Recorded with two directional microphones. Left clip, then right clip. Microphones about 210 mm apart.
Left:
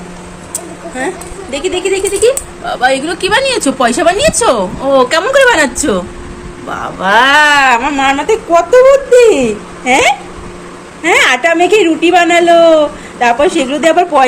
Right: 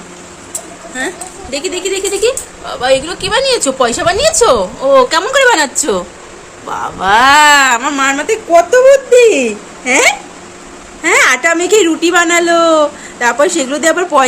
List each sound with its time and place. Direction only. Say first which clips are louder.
0.9 s a woman's voice: left 1 dB; 20° right (ahead or behind)
2.6 s a woman's voice: left 1 dB; centre (ahead or behind); by 14.3 s 25° right (ahead or behind)